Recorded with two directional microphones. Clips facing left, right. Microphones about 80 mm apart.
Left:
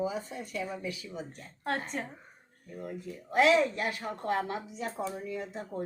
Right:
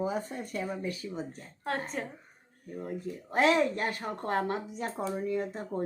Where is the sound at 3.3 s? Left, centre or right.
Right.